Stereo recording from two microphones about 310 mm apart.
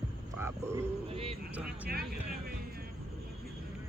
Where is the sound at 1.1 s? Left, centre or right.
Centre.